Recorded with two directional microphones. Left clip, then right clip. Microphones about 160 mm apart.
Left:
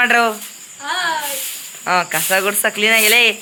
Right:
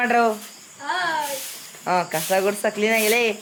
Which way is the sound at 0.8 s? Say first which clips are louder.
Left 4 dB; 35° right (ahead or behind).